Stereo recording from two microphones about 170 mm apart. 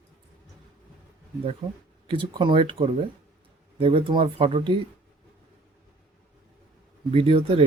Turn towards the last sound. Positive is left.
turn(degrees=-35)  # may be behind; listen again after turning